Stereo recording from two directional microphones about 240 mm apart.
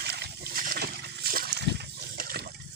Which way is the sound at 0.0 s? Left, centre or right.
Right.